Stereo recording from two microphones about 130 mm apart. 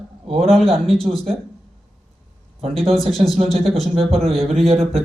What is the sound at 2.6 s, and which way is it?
Speech, 45° right (ahead or behind).